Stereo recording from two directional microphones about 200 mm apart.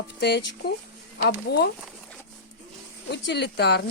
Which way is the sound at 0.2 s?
55° left (ahead or behind).